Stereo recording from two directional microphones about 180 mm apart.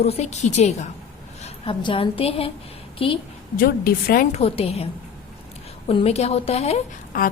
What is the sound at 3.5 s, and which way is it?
Speech, 55° left (ahead or behind).